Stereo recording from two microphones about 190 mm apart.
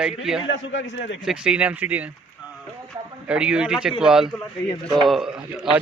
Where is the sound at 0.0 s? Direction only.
5° right (ahead or behind).